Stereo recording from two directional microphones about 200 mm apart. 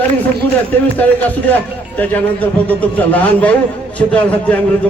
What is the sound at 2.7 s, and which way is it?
A man's voice, 10° left (ahead or behind).